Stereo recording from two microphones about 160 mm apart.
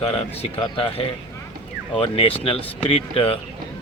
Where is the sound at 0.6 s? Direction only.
35° left (ahead or behind).